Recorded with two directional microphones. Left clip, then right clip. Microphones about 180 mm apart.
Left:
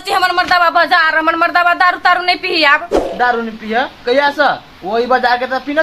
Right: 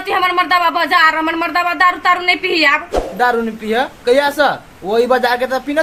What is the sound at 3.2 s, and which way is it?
Speech, 40° right (ahead or behind).